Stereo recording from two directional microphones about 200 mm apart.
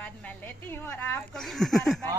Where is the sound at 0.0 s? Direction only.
5° left (ahead or behind).